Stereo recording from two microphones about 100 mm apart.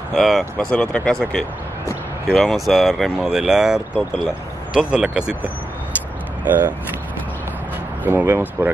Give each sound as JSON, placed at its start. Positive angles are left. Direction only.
{"t": 0.1, "sound": "speech", "side_deg": 0}
{"t": 0.7, "sound": "speech", "side_deg": 10}
{"t": 6.4, "sound": "speech", "side_deg": -20}
{"t": 8.0, "sound": "speech", "side_deg": -20}